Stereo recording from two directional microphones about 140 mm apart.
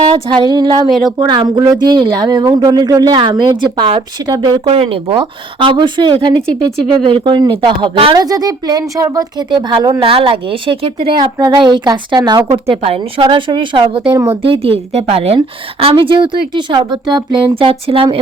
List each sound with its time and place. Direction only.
0.1 s speech: 35° right (ahead or behind)
0.9 s speech: centre (ahead or behind)
1.2 s speech: 30° right (ahead or behind)
8.1 s speech: 30° right (ahead or behind)
10.0 s speech: 40° right (ahead or behind)
12.5 s speech: 45° right (ahead or behind)
17.6 s speech: 40° right (ahead or behind)